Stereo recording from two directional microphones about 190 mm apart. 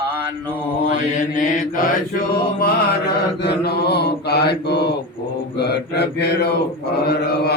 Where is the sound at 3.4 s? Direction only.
60° left (ahead or behind).